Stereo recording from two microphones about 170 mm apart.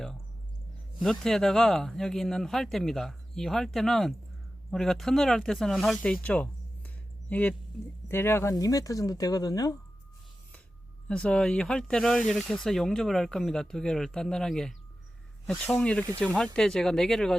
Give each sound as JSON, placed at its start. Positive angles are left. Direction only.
{"t": 1.0, "sound": "speech", "side_deg": 5}
{"t": 6.2, "sound": "a sound", "side_deg": 10}
{"t": 8.0, "sound": "speech", "side_deg": 15}
{"t": 11.1, "sound": "speech", "side_deg": 5}